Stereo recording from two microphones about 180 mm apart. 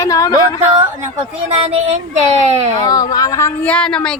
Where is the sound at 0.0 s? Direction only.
20° left (ahead or behind).